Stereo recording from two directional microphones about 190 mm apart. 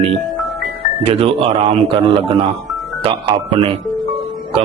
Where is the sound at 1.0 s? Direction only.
30° right (ahead or behind).